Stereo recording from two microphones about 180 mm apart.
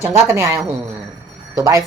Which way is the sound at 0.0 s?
15° right (ahead or behind).